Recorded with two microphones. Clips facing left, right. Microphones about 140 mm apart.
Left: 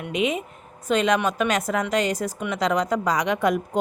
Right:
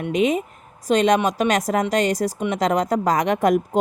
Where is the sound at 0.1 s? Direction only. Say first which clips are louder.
Right 4 dB; 40° right (ahead or behind).